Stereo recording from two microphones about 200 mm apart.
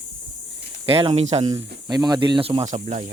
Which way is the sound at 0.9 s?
30° right (ahead or behind).